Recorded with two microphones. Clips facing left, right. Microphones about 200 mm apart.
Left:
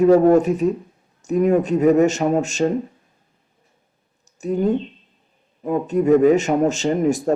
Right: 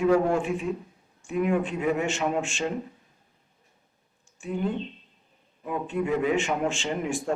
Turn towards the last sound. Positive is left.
turn(degrees=40)  # may be behind; listen again after turning